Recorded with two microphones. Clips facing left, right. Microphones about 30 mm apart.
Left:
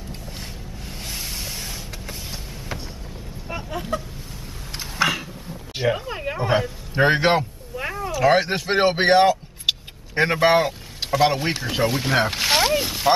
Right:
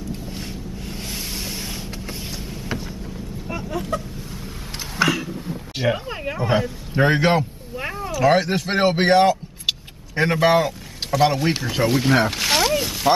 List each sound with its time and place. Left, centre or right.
0.3 s vehicle: centre
3.4 s chicken: centre
5.0 s cat: centre
5.9 s speech: centre
7.0 s speech: centre
7.7 s a sound: centre
8.1 s speech: centre
9.7 s vehicle: centre
11.1 s speech: centre
11.8 s a sound: centre